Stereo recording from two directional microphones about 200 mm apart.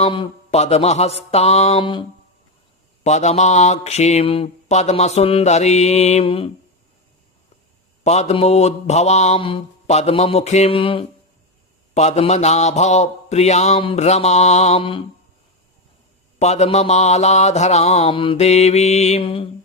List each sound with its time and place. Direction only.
0.0 s mantra: 30° left (ahead or behind)
8.0 s mantra: 35° left (ahead or behind)
16.4 s mantra: 35° left (ahead or behind)